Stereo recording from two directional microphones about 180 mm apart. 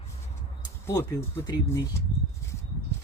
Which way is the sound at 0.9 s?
15° left (ahead or behind).